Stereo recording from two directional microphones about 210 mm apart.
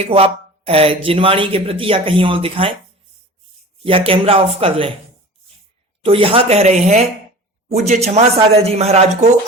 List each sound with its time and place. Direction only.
0.0 s speech: 30° right (ahead or behind)
3.8 s speech: 25° right (ahead or behind)
6.1 s speech: 25° right (ahead or behind)